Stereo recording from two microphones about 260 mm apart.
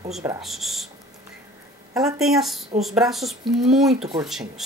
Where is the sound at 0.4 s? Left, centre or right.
Centre.